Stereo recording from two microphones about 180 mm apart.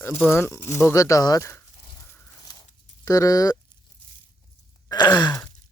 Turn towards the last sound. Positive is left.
turn(degrees=20)  # may be behind; listen again after turning